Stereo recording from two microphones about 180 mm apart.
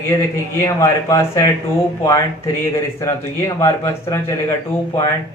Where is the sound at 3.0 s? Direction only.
15° left (ahead or behind).